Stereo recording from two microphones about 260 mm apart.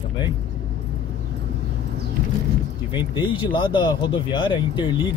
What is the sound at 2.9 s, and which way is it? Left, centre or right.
Speech, centre.